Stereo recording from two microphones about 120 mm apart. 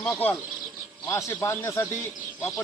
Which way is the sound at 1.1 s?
25° left (ahead or behind).